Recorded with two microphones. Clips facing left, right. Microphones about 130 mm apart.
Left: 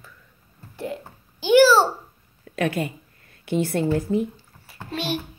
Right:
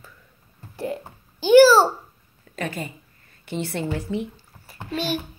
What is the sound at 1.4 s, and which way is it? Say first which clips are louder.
Babbling: right 3 dB; centre (ahead or behind).